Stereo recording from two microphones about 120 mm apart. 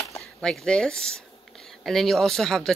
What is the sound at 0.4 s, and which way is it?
Speech, 5° left (ahead or behind).